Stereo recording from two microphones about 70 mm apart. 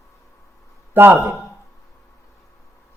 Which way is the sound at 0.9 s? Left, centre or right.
Right.